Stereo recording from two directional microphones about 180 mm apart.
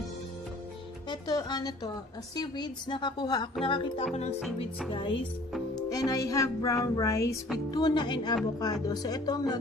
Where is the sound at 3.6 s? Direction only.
30° left (ahead or behind).